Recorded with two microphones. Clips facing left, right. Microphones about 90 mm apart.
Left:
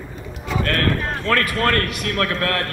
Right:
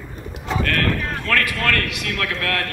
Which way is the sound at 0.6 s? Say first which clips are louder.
Left 1 dB; 30° left (ahead or behind).